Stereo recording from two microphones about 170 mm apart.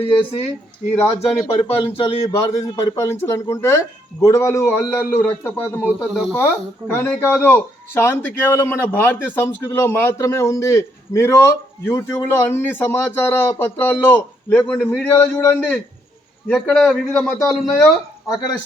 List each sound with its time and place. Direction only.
0.0 s speech: 35° left (ahead or behind)
1.6 s speech: 35° left (ahead or behind)
2.2 s a man's voice: 20° left (ahead or behind); by 17.8 s centre (ahead or behind)
18.3 s speech: 25° left (ahead or behind)